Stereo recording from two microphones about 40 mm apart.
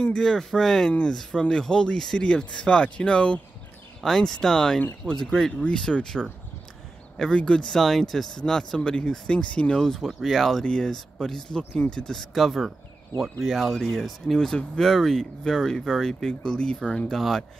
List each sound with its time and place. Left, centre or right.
0.2 s speech: centre
1.4 s speech: centre
4.0 s speech: centre
7.3 s speech: left
7.7 s speech: centre; by 9.8 s left
9.9 s speech: centre
10.6 s speech: centre
11.5 s speech: left
12.1 s speech: centre
12.4 s speech: centre; by 17.0 s left
17.1 s speech: centre